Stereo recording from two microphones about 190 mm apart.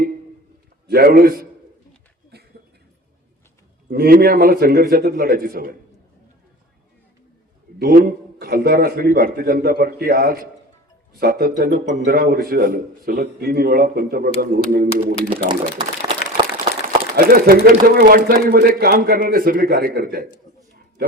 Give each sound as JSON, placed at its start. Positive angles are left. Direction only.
{"t": 0.9, "sound": "speech", "side_deg": -55}
{"t": 2.3, "sound": "a sound", "side_deg": -55}
{"t": 3.8, "sound": "speech", "side_deg": -50}
{"t": 7.8, "sound": "speech", "side_deg": -50}
{"t": 15.3, "sound": "speech", "side_deg": -25}
{"t": 16.8, "sound": "speech", "side_deg": -50}